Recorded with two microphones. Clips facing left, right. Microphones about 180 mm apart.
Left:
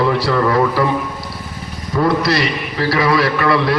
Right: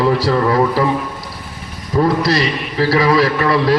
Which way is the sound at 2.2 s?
30° right (ahead or behind).